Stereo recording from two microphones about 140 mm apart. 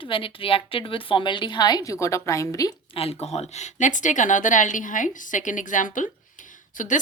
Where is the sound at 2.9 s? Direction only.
45° left (ahead or behind).